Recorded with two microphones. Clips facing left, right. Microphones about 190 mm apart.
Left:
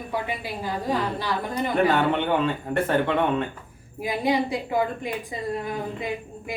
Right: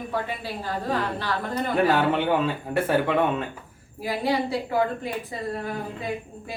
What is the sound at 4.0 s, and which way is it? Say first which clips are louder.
A woman's voice: left 1 dB; 15° left (ahead or behind).